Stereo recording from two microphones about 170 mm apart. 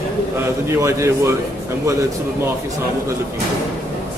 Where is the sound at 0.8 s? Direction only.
15° right (ahead or behind).